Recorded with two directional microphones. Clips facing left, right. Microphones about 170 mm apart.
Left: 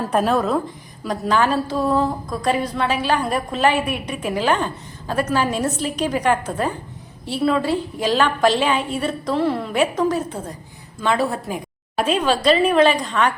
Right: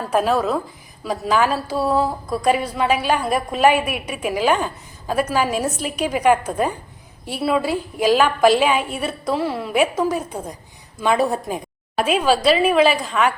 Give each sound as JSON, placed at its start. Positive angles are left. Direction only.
{"t": 0.0, "sound": "a woman's voice", "side_deg": 0}